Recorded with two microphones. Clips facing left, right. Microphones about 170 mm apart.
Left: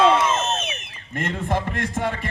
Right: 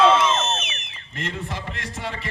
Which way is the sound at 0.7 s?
50° left (ahead or behind).